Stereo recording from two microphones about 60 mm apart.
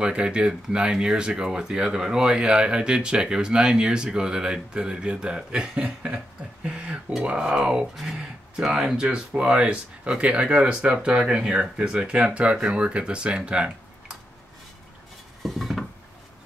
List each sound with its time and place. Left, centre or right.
0.0 s speech: centre
15.4 s dishes: centre